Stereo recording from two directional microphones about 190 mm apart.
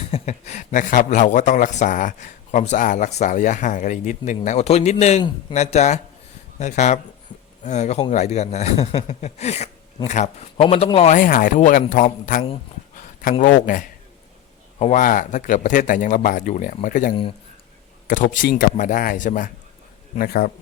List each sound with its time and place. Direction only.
0.1 s a man's voice: 35° left (ahead or behind); by 20.5 s 50° left (ahead or behind)